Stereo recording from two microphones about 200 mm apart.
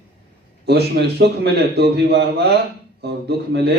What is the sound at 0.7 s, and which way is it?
A man's voice, 55° right (ahead or behind).